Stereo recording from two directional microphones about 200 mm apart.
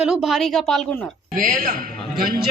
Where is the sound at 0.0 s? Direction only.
5° right (ahead or behind).